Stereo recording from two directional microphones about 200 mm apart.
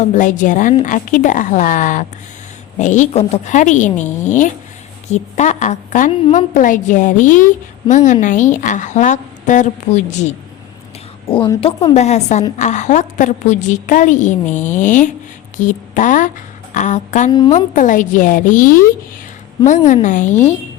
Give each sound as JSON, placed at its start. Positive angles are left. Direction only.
{"t": 0.0, "sound": "a woman's voice", "side_deg": 40}
{"t": 11.3, "sound": "a woman's voice", "side_deg": 25}